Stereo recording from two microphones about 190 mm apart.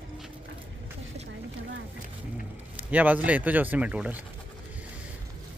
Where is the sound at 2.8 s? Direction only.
10° right (ahead or behind).